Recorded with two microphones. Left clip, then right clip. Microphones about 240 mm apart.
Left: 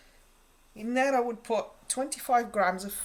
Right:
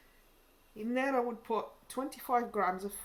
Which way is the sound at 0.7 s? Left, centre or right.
Left.